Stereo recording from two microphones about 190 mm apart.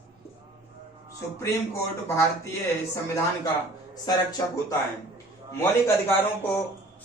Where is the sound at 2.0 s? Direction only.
15° left (ahead or behind).